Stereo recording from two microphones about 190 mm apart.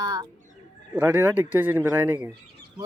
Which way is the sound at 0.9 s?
10° right (ahead or behind).